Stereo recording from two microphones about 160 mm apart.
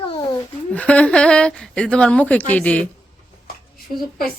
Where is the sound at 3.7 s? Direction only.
65° left (ahead or behind).